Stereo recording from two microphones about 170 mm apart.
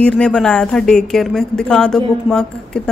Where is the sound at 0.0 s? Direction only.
5° left (ahead or behind).